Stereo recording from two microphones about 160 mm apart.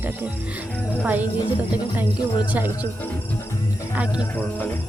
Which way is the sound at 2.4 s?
10° right (ahead or behind).